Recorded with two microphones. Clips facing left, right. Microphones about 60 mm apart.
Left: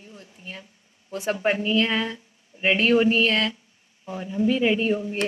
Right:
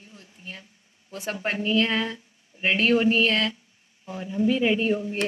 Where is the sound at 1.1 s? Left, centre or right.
Centre.